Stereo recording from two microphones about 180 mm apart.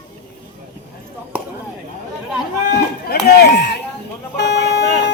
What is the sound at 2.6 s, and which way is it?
Speech, 65° left (ahead or behind).